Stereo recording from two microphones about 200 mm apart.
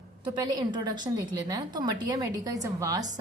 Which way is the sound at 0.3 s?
20° right (ahead or behind).